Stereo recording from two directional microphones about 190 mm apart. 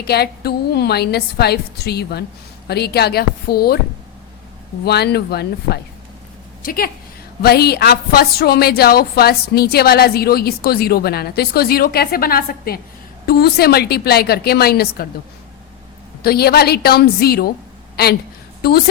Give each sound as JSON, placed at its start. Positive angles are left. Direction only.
{"t": 0.0, "sound": "speech", "side_deg": 55}
{"t": 4.9, "sound": "speech", "side_deg": 60}
{"t": 16.2, "sound": "speech", "side_deg": 55}